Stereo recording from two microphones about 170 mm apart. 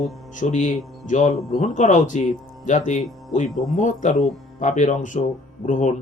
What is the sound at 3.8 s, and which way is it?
Speech, 45° left (ahead or behind).